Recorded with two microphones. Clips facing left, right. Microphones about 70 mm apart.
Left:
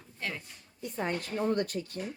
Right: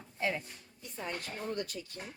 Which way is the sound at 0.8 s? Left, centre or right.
Left.